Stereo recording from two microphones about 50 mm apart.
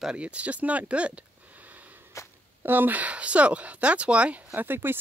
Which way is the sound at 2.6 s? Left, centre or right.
Right.